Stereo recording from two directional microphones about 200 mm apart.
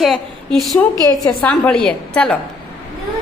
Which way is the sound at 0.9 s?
20° right (ahead or behind).